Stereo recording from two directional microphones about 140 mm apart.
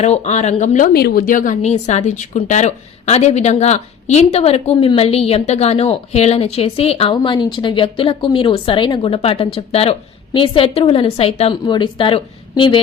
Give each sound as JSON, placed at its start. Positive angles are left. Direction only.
{"t": 0.0, "sound": "a woman's voice", "side_deg": 50}